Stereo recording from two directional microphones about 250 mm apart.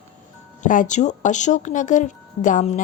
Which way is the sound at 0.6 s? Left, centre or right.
Left.